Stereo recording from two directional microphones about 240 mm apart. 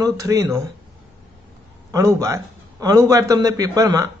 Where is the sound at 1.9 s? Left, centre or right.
Centre.